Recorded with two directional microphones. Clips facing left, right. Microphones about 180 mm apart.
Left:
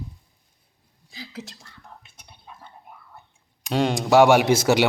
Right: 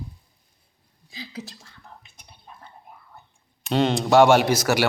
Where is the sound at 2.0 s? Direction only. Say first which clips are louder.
Left 1 dB; 5° left (ahead or behind).